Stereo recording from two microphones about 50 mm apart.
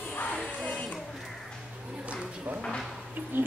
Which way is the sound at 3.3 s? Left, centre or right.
Right.